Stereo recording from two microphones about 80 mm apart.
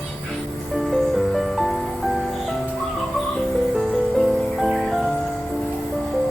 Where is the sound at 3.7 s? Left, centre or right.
Centre.